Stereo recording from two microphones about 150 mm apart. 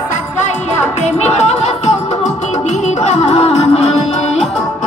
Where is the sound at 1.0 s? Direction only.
45° left (ahead or behind).